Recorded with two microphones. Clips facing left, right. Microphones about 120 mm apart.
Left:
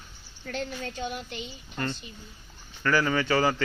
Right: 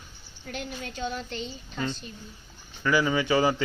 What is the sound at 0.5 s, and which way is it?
Speech, 30° left (ahead or behind).